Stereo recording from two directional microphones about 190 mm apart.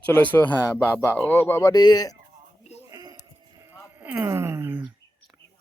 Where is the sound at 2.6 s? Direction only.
35° left (ahead or behind).